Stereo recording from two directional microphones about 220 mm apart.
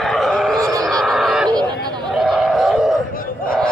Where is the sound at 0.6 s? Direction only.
15° right (ahead or behind).